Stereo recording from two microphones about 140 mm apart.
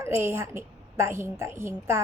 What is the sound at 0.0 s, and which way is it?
A woman's voice, 15° right (ahead or behind).